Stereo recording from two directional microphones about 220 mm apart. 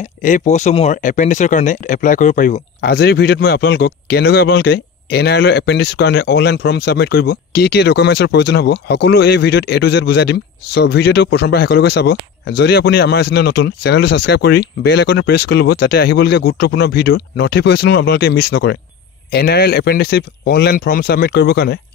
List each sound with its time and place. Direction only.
0.0 s speech: 35° left (ahead or behind)